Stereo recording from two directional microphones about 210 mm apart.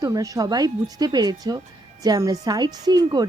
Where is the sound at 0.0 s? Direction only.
15° right (ahead or behind).